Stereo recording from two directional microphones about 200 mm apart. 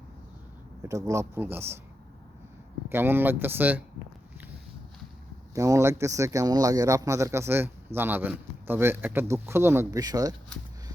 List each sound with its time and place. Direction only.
0.8 s speech: 15° right (ahead or behind)
2.9 s speech: 10° right (ahead or behind)
5.5 s speech: 15° right (ahead or behind)